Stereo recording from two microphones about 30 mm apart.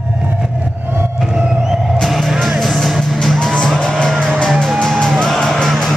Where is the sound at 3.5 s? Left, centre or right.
Left.